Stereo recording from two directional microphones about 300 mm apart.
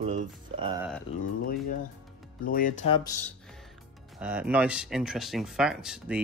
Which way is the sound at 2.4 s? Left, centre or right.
Left.